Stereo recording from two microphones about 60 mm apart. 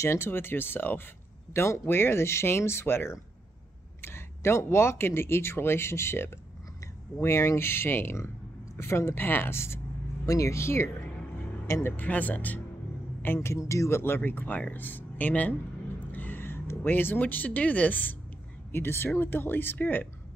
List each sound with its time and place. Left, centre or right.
0.0 s speech: left
10.2 s speech: left
12.0 s speech: left
13.2 s speech: left